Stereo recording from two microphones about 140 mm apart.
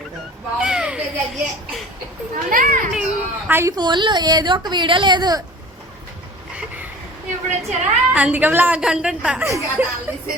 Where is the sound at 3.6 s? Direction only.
30° right (ahead or behind).